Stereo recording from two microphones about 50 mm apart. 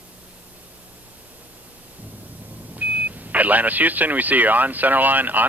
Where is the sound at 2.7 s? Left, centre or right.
Right.